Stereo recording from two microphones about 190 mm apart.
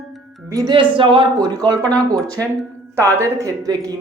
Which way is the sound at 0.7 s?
25° right (ahead or behind).